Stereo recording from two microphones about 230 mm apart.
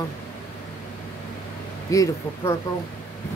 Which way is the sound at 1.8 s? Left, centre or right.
Centre.